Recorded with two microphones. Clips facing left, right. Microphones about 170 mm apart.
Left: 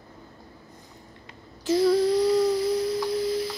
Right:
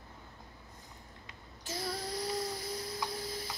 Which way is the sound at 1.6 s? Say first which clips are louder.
Left 19 dB; 90° left.